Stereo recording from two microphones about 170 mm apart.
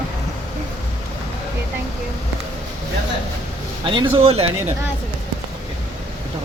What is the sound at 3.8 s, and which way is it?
Speech, 30° right (ahead or behind).